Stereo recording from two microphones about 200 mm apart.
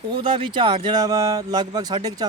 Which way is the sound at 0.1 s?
25° right (ahead or behind).